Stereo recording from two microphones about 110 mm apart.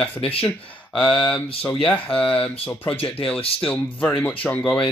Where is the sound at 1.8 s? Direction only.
10° left (ahead or behind).